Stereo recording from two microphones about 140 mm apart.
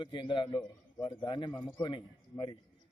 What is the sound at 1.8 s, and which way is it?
Speech, 35° left (ahead or behind).